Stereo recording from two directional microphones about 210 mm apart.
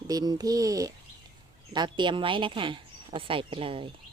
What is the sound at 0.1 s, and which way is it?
A child's voice, 15° right (ahead or behind).